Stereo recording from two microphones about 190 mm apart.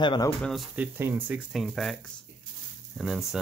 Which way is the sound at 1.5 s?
Centre (ahead or behind).